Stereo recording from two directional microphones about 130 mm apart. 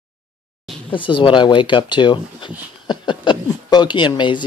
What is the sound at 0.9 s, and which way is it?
Speech, 40° left (ahead or behind).